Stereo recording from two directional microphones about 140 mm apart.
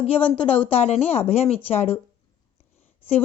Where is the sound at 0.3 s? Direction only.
40° left (ahead or behind).